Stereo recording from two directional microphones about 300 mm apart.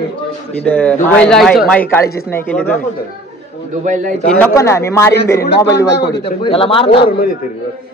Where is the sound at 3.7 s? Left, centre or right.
Right.